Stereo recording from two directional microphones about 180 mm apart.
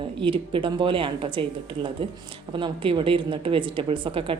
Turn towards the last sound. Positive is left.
turn(degrees=-30)  # may be behind; listen again after turning